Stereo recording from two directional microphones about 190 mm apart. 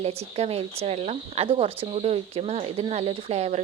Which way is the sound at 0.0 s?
30° right (ahead or behind).